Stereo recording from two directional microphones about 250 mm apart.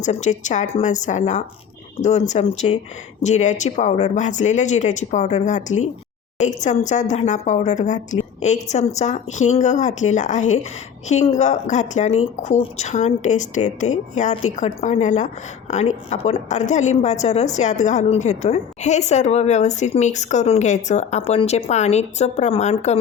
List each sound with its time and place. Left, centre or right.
0.0 s a woman's voice: left